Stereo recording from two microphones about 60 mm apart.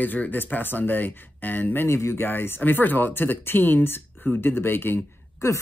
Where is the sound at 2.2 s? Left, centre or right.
Left.